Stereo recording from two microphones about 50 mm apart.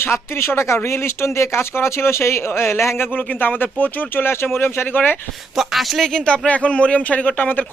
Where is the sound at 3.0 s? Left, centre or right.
Left.